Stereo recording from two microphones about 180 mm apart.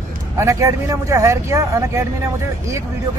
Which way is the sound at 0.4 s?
20° right (ahead or behind).